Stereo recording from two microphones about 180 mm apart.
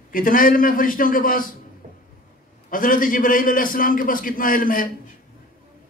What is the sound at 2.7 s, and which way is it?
A man's voice, 50° left (ahead or behind).